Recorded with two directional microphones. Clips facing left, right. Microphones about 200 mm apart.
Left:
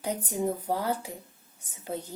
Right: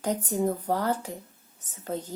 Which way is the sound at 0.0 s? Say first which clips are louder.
Right 3 dB; 10° left (ahead or behind).